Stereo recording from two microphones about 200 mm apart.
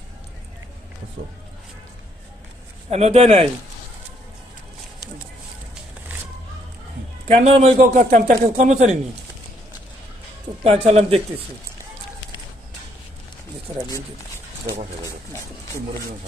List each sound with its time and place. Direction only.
2.9 s speech: 30° right (ahead or behind)
6.1 s a sound: 5° right (ahead or behind)
7.2 s speech: 30° right (ahead or behind)
10.6 s speech: 30° right (ahead or behind)